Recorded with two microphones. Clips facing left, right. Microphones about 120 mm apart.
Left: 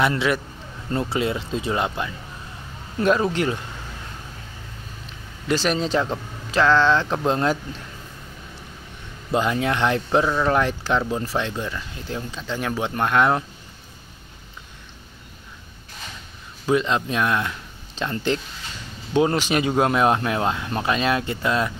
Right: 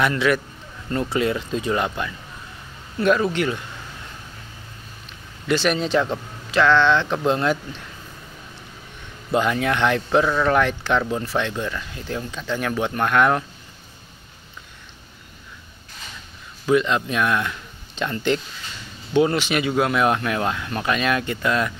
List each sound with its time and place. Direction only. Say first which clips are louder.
0.0 s speech: right 1 dB; 25° left (ahead or behind)
3.0 s speech: right 1 dB; 30° left (ahead or behind)
5.5 s speech: right 1 dB; 35° left (ahead or behind)
9.3 s speech: right 1 dB; 25° left (ahead or behind)
11.5 s speech: right 2 dB; 20° left (ahead or behind)
16.7 s speech: right 2 dB; 30° left (ahead or behind)